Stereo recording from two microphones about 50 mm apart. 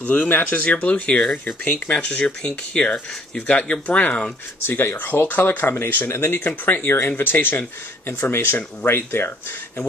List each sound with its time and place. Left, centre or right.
0.0 s speech: left
4.6 s speech: left
4.9 s speech: left